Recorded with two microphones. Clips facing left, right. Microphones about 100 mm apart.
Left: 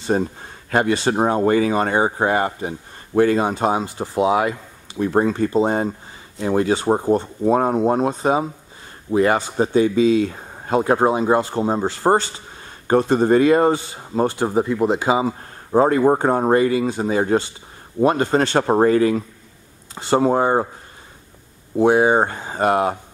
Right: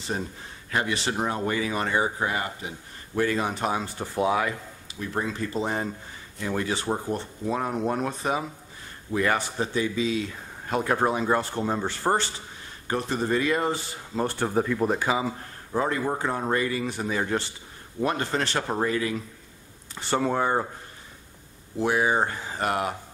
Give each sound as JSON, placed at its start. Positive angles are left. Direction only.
{"t": 0.0, "sound": "speech", "side_deg": 45}
{"t": 3.3, "sound": "speech", "side_deg": 30}
{"t": 3.8, "sound": "speech", "side_deg": 20}
{"t": 4.9, "sound": "speech", "side_deg": 50}
{"t": 5.5, "sound": "speech", "side_deg": 30}
{"t": 7.8, "sound": "speech", "side_deg": 25}
{"t": 14.1, "sound": "speech", "side_deg": 60}
{"t": 14.5, "sound": "speech", "side_deg": 20}
{"t": 15.7, "sound": "speech", "side_deg": 45}
{"t": 22.0, "sound": "speech", "side_deg": 45}
{"t": 22.5, "sound": "speech", "side_deg": 30}